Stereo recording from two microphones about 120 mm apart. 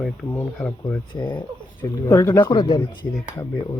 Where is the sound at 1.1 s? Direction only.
40° left (ahead or behind).